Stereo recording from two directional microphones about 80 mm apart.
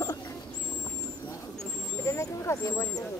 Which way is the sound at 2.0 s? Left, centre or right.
Left.